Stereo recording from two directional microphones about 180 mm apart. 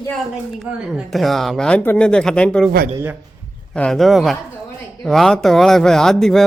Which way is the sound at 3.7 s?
5° left (ahead or behind).